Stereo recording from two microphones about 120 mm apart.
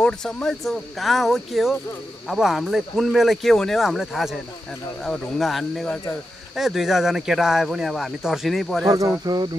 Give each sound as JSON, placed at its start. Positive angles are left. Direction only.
{"t": 0.0, "sound": "speech", "side_deg": 5}
{"t": 8.8, "sound": "speech", "side_deg": -25}